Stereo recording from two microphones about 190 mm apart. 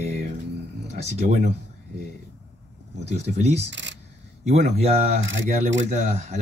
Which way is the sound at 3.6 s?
70° right (ahead or behind).